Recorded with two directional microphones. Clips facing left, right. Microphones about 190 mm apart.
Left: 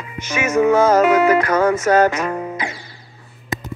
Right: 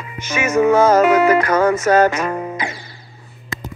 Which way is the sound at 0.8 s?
40° right (ahead or behind).